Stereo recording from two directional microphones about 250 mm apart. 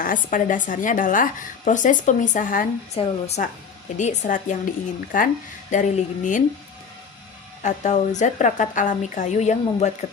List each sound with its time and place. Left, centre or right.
0.0 s a woman's voice: left
7.6 s a woman's voice: left